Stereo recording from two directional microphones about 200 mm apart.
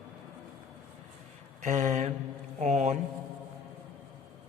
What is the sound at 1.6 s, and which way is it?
A woman's voice, 40° right (ahead or behind).